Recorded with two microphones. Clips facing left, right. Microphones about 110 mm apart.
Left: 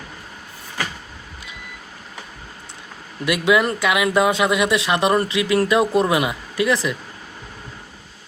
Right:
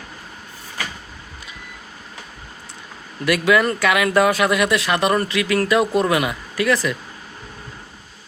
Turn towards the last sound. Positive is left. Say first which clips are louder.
# even
turn(degrees=20)  # may be behind; listen again after turning